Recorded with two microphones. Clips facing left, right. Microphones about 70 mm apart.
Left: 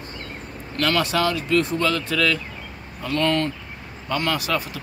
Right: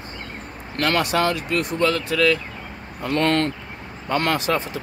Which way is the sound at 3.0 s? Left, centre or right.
Right.